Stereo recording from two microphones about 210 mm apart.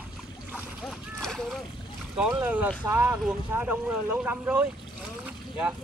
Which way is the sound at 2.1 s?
5° right (ahead or behind).